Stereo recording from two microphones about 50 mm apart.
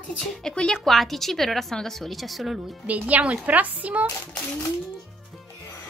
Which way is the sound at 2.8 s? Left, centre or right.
Right.